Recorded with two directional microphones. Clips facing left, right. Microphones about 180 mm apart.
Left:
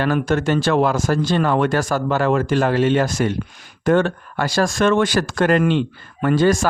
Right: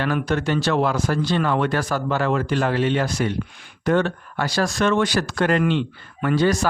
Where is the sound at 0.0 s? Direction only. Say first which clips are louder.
Left 4 dB; 45° left (ahead or behind).